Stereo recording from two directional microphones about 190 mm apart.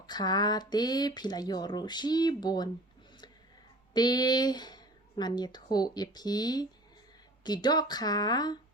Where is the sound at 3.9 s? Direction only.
20° left (ahead or behind).